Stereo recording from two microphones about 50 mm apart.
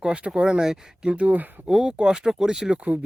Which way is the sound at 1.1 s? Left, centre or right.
Right.